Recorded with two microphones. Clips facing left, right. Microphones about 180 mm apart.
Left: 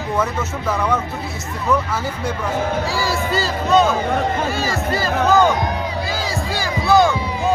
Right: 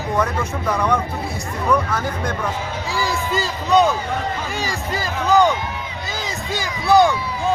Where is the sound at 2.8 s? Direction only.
15° right (ahead or behind).